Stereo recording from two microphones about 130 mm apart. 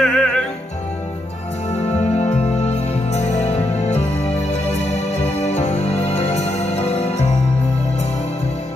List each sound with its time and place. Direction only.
0.0 s music: 5° left (ahead or behind)
2.1 s music: 55° left (ahead or behind)
5.4 s music: 60° left (ahead or behind)